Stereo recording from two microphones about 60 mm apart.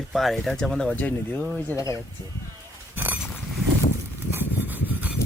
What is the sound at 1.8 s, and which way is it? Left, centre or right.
Speech, left.